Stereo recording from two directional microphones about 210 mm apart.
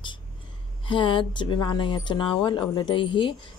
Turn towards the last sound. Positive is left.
turn(degrees=20)  # may be behind; listen again after turning